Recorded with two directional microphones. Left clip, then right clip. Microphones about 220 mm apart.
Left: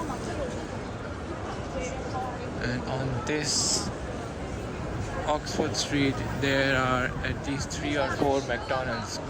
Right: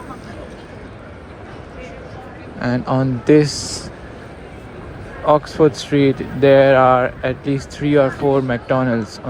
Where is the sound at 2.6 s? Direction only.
15° right (ahead or behind).